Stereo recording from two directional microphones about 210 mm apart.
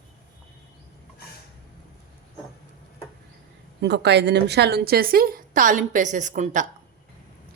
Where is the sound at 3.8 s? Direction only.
55° right (ahead or behind); by 6.7 s 35° right (ahead or behind).